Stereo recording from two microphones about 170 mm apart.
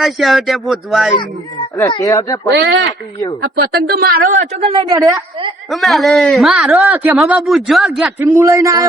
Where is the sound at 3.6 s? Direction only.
70° right (ahead or behind).